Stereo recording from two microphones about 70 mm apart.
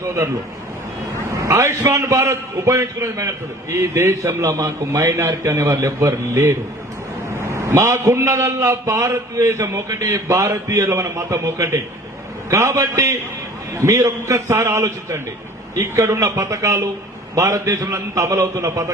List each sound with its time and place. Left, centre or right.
0.0 s a man's voice: right
1.5 s a man's voice: right
13.8 s a man's voice: right